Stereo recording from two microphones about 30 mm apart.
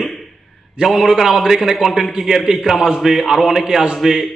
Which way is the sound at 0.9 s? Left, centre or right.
Centre.